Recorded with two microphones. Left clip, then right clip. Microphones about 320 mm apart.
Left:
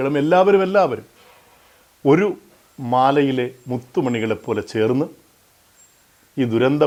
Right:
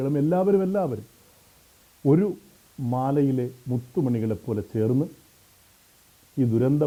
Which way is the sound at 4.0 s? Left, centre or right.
Centre.